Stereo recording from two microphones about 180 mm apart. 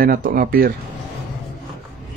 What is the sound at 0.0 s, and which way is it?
Speech, 55° right (ahead or behind).